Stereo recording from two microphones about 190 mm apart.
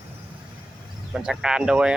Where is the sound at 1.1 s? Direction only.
5° right (ahead or behind).